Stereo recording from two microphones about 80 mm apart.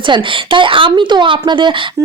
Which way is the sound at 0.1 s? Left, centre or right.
Right.